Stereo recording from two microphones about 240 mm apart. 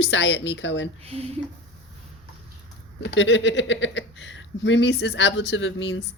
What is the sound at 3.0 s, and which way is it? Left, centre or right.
Speech, left.